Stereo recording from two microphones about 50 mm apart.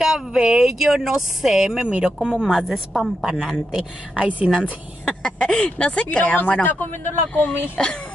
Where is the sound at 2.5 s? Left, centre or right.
Centre.